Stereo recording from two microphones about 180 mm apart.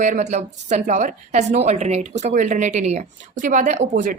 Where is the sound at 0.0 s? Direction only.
40° right (ahead or behind).